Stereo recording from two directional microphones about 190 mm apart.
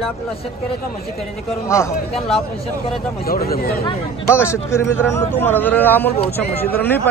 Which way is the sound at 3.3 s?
55° left (ahead or behind).